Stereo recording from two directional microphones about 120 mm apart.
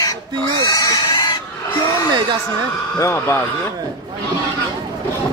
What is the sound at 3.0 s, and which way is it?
Speech, 25° left (ahead or behind).